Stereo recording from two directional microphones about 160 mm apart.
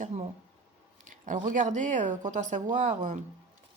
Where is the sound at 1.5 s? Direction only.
50° right (ahead or behind).